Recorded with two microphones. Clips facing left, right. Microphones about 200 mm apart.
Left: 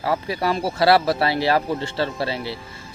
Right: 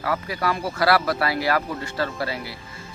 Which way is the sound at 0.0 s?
25° left (ahead or behind).